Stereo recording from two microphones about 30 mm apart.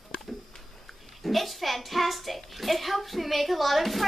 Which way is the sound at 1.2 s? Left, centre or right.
Centre.